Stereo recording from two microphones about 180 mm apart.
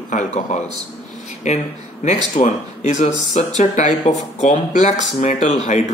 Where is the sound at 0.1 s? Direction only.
40° left (ahead or behind).